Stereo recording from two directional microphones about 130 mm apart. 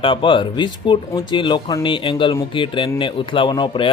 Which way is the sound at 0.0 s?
40° left (ahead or behind).